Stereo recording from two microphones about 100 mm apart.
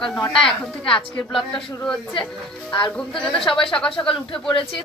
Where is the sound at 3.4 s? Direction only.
65° left (ahead or behind).